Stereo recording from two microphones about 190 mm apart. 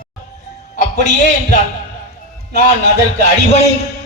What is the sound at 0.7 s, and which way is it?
Speech, 40° left (ahead or behind).